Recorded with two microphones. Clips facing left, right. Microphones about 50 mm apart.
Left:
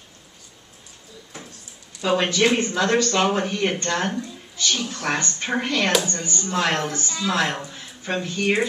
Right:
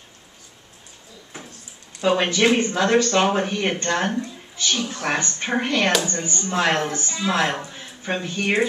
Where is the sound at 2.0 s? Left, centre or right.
Centre.